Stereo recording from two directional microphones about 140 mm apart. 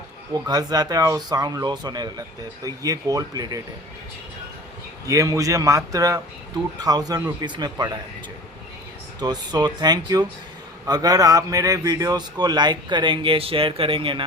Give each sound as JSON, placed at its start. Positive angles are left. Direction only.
{"t": 0.4, "sound": "speech", "side_deg": -30}
{"t": 5.0, "sound": "speech", "side_deg": -25}
{"t": 9.2, "sound": "speech", "side_deg": -30}